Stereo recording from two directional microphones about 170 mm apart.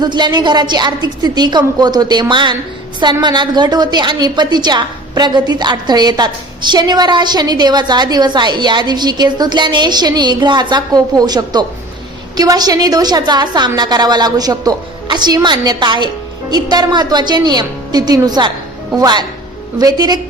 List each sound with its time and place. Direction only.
0.0 s a woman's voice: 25° right (ahead or behind)